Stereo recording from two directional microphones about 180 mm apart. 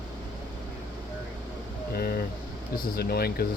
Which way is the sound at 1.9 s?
55° left (ahead or behind).